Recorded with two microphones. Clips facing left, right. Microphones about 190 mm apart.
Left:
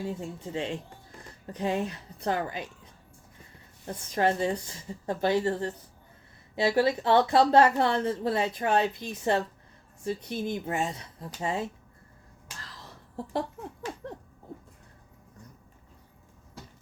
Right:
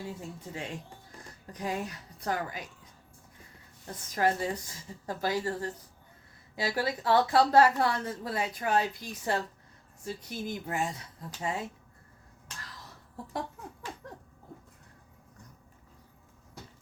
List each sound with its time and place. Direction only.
0.0 s speech: 25° left (ahead or behind)
3.8 s speech: 25° left (ahead or behind)